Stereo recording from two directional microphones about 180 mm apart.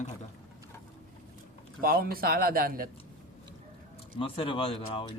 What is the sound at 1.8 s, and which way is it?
A man's voice, 55° right (ahead or behind).